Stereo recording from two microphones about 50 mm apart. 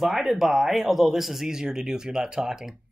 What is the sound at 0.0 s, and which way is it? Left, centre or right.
Speech, centre.